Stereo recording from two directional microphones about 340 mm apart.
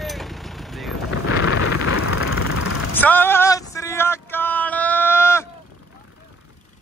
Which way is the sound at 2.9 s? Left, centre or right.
Centre.